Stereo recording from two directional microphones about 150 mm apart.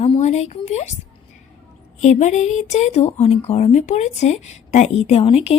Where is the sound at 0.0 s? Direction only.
45° left (ahead or behind).